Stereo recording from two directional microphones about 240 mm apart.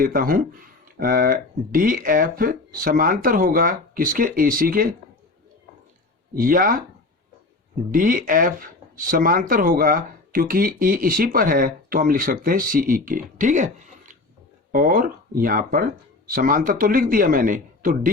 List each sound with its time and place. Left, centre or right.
0.0 s speech: right
6.3 s speech: right
7.9 s speech: right
14.7 s speech: right